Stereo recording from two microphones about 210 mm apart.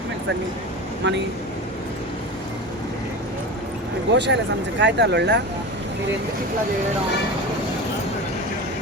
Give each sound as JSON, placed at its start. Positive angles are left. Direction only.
{"t": 1.0, "sound": "speech", "side_deg": -55}
{"t": 4.1, "sound": "speech", "side_deg": -55}